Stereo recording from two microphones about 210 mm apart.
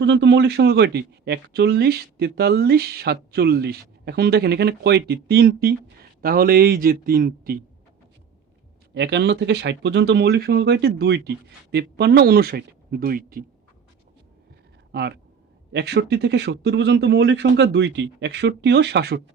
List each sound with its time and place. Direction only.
0.0 s speech: 60° right (ahead or behind)
9.0 s speech: 55° right (ahead or behind)
14.9 s speech: 55° right (ahead or behind)